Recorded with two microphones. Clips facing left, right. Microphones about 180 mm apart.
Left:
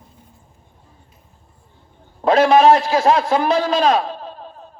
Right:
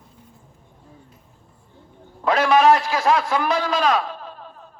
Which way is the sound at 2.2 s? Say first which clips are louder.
Left 4 dB; 25° left (ahead or behind).